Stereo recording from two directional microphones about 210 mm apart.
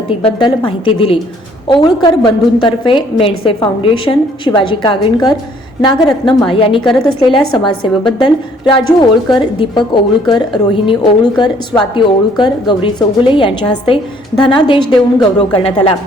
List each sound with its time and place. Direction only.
0.6 s a woman's voice: 25° left (ahead or behind)